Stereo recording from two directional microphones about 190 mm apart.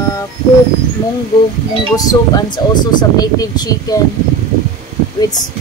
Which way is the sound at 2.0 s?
20° left (ahead or behind).